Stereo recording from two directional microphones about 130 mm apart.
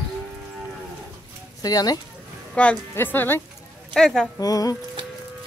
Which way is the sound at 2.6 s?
10° left (ahead or behind).